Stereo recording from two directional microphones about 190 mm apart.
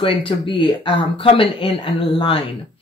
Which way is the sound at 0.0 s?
30° left (ahead or behind).